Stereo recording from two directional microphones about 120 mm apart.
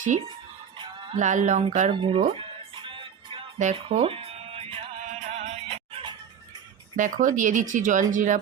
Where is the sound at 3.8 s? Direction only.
50° right (ahead or behind).